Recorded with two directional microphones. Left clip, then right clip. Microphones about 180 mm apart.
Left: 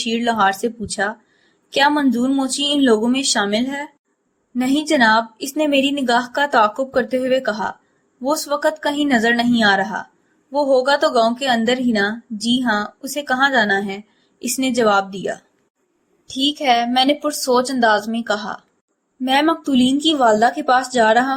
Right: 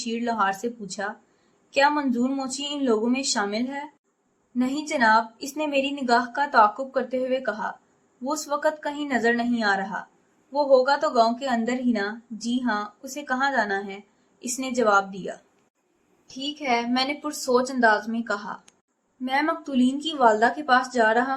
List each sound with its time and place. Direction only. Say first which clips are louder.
0.0 s a woman's voice: left 8 dB; 30° left (ahead or behind)